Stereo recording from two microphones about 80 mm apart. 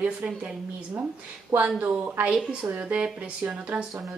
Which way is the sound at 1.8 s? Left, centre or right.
Centre.